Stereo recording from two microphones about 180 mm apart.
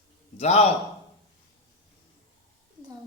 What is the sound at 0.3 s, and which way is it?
Speech, 35° left (ahead or behind).